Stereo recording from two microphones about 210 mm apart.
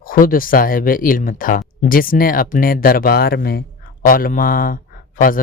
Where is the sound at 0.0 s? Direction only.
40° left (ahead or behind).